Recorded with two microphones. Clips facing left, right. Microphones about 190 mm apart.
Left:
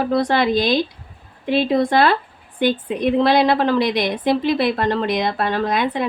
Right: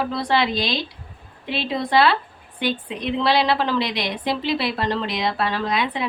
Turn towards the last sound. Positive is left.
turn(degrees=50)  # may be behind; listen again after turning